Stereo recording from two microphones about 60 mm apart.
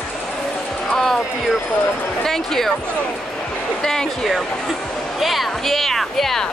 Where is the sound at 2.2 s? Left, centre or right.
Centre.